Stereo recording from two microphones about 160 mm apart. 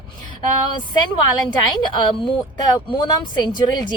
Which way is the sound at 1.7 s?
30° left (ahead or behind).